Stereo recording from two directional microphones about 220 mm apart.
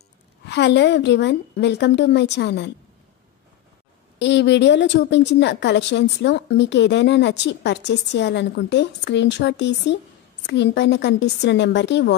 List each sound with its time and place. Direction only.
0.5 s a woman's voice: 50° left (ahead or behind)
4.2 s a woman's voice: 55° left (ahead or behind)